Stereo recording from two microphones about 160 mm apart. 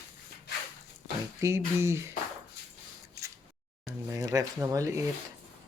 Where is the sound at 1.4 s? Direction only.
15° right (ahead or behind).